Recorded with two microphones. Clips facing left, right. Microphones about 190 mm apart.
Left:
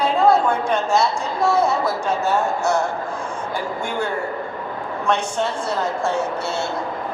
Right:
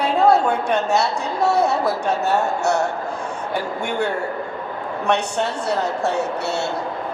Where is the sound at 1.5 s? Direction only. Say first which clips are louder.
Even; 70° right (ahead or behind).